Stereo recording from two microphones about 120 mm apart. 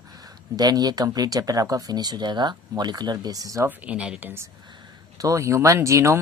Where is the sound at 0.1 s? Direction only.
35° right (ahead or behind).